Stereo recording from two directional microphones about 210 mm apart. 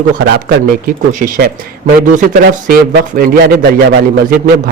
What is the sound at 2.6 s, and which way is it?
Speech, 45° right (ahead or behind).